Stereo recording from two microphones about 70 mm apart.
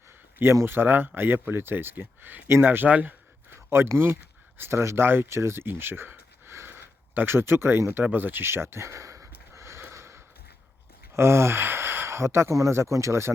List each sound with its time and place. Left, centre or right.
0.6 s speech: right
8.0 s a sound: right
11.1 s speech: right